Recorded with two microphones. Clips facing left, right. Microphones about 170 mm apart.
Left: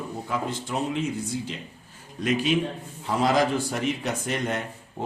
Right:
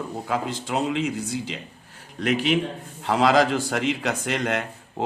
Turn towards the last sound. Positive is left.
turn(degrees=-85)